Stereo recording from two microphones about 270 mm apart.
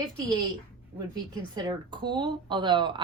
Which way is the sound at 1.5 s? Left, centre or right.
Centre.